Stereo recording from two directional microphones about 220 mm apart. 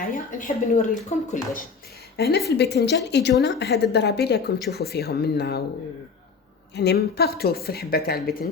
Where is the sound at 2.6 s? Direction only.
50° left (ahead or behind).